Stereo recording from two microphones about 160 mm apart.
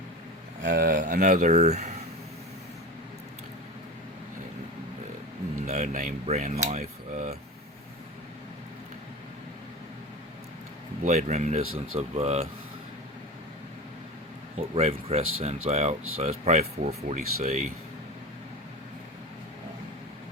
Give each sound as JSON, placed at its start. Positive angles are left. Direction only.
{"t": 0.6, "sound": "speech", "side_deg": -65}
{"t": 5.6, "sound": "speech", "side_deg": -45}
{"t": 11.0, "sound": "speech", "side_deg": -50}
{"t": 14.8, "sound": "speech", "side_deg": -40}